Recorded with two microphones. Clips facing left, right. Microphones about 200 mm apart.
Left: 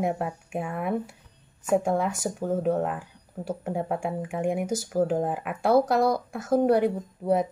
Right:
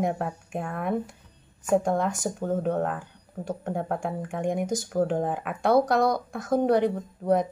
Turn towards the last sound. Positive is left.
turn(degrees=5)  # may be behind; listen again after turning